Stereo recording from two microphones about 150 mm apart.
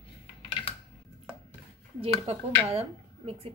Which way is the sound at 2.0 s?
40° right (ahead or behind).